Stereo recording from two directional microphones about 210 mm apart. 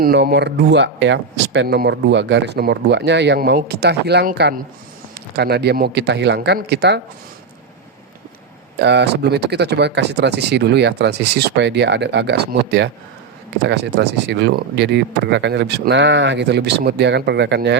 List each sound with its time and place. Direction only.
0.0 s speech: 50° right (ahead or behind)
8.8 s speech: 55° right (ahead or behind)